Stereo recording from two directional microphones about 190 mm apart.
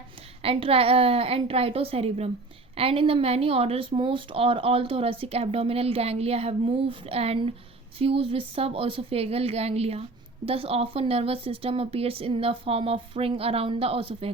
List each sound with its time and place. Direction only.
0.4 s speech: 30° right (ahead or behind)